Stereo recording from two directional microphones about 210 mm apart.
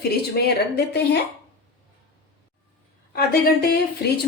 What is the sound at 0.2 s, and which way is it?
Speech, 50° left (ahead or behind).